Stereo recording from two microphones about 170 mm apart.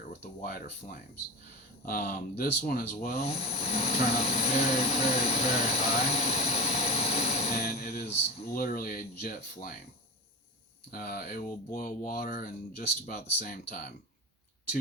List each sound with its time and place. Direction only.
0.1 s speech: 65° left (ahead or behind)
3.2 s speech: 40° left (ahead or behind)
7.8 s music: 65° left (ahead or behind)
8.5 s speech: 60° left (ahead or behind)
10.9 s speech: 60° left (ahead or behind)